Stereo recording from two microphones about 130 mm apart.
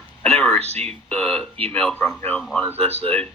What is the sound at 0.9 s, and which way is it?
Speech, 10° left (ahead or behind).